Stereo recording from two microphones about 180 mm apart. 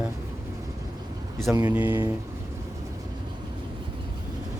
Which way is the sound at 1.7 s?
10° right (ahead or behind).